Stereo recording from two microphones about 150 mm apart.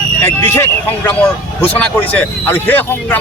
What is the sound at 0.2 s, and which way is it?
Speech, 15° left (ahead or behind).